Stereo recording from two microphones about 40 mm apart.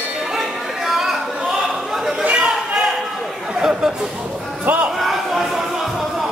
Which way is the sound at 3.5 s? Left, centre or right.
Centre.